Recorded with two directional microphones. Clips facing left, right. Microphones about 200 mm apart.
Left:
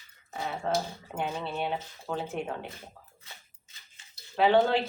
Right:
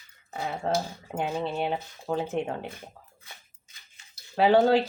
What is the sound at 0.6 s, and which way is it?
Speech, 35° right (ahead or behind).